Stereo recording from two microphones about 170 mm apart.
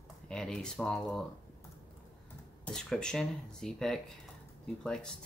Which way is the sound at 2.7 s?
5° left (ahead or behind).